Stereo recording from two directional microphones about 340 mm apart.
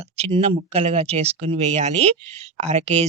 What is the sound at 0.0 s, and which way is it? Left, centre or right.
Speech, centre.